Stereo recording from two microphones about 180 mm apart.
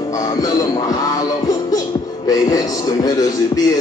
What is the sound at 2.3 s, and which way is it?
Speech, 20° left (ahead or behind).